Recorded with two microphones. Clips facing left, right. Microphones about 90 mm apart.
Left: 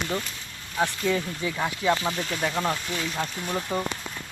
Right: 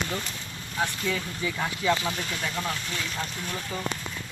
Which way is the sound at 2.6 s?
40° left (ahead or behind).